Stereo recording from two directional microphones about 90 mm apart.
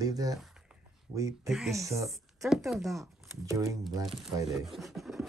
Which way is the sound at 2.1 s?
Centre (ahead or behind).